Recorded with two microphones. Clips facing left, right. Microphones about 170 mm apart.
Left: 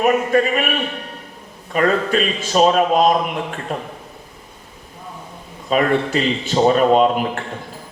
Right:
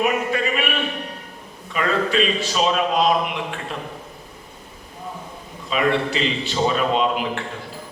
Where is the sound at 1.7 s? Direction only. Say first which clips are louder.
Left 4 dB; 45° left (ahead or behind).